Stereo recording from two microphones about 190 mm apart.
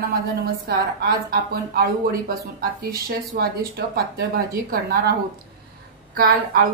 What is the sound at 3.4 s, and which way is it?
A woman's voice, 55° right (ahead or behind).